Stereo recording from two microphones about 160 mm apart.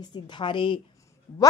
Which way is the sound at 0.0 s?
30° left (ahead or behind).